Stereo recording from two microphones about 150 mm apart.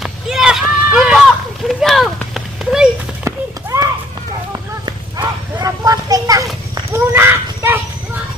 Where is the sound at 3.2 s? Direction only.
20° right (ahead or behind).